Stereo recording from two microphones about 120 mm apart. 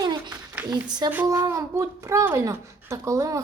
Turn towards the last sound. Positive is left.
turn(degrees=-25)  # may be behind; listen again after turning